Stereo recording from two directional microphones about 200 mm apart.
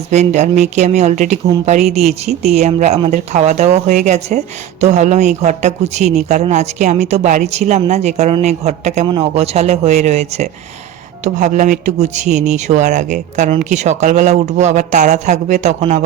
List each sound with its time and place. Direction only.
0.1 s speech: 35° right (ahead or behind)